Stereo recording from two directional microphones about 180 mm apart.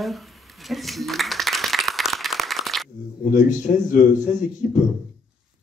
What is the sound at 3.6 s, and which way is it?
Speech, 40° left (ahead or behind).